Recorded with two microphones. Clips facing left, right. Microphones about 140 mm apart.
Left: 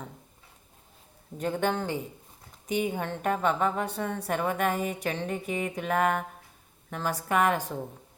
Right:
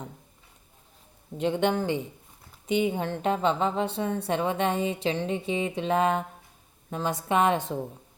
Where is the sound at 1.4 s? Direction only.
20° right (ahead or behind).